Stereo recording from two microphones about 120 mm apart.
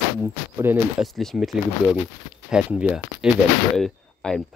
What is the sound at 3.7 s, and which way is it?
Speech, 5° left (ahead or behind).